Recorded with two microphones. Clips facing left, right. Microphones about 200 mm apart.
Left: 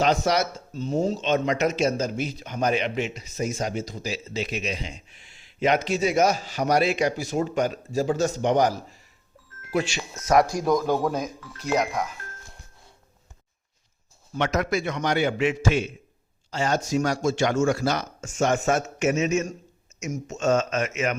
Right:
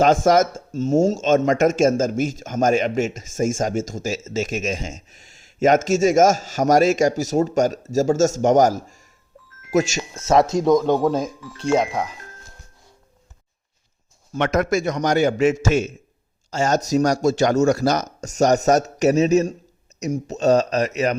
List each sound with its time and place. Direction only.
0.0 s speech: 45° right (ahead or behind)
10.2 s speech: 25° right (ahead or behind)
14.3 s speech: 55° right (ahead or behind); by 21.2 s 35° right (ahead or behind)